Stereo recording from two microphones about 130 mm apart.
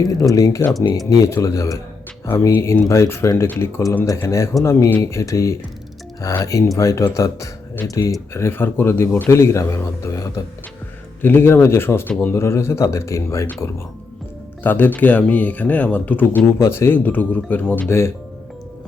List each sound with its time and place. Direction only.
0.2 s a man's voice: 25° left (ahead or behind)